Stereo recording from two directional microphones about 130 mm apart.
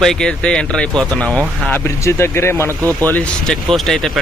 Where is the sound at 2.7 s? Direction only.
25° right (ahead or behind).